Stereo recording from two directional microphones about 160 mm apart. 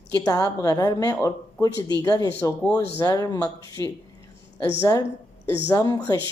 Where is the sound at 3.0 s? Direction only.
25° left (ahead or behind).